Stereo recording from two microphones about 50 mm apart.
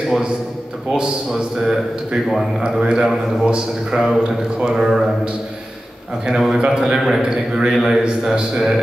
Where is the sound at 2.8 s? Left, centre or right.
Centre.